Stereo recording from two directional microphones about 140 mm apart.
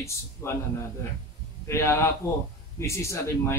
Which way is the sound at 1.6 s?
20° left (ahead or behind).